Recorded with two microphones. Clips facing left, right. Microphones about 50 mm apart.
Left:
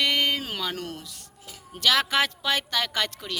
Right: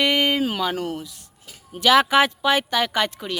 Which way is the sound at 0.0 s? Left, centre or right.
Right.